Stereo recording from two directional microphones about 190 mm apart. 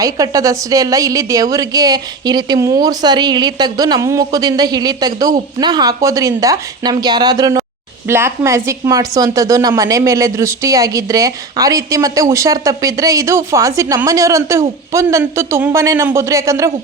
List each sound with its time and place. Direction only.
0.0 s a woman's voice: 15° right (ahead or behind)